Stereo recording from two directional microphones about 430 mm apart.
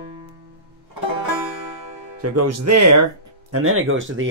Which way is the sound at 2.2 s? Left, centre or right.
Right.